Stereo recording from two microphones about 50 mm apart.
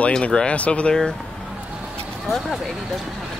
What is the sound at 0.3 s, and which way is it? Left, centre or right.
Speech, centre.